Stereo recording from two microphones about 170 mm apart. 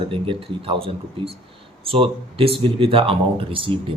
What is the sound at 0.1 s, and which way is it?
Speech, 30° right (ahead or behind).